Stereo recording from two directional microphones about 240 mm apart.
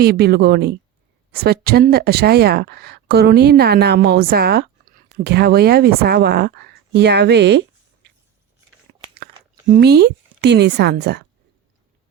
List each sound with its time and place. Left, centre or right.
0.0 s speech: right
9.7 s a woman's voice: right